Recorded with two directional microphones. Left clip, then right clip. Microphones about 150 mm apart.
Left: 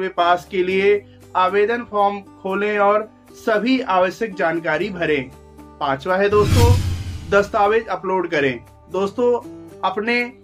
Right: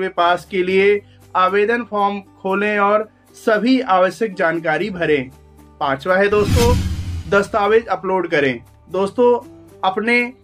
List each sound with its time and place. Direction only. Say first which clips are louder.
0.0 s speech: right 1 dB; 35° right (ahead or behind)